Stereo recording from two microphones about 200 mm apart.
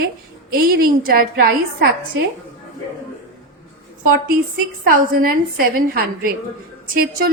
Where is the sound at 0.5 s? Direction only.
50° right (ahead or behind).